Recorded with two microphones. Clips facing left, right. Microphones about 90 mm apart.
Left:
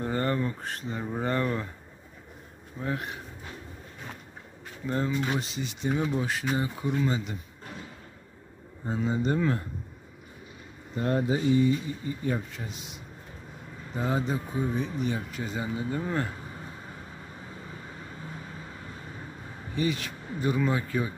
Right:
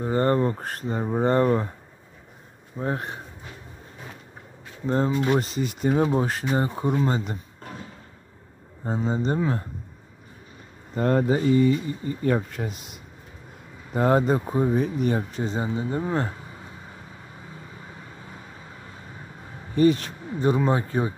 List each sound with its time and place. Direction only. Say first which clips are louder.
0.2 s speech: right 7 dB; 35° right (ahead or behind)
2.8 s speech: right 4 dB; 35° right (ahead or behind)
4.8 s speech: right 5 dB; 35° right (ahead or behind)
5.2 s speech: right 7 dB; 50° right (ahead or behind)
8.8 s speech: right 2 dB; 30° right (ahead or behind)
11.0 s speech: right 5 dB; 45° right (ahead or behind)
13.9 s speech: right 9 dB; 55° right (ahead or behind)
15.3 s speech: right 5 dB; 30° right (ahead or behind)
19.7 s speech: right 10 dB; 40° right (ahead or behind)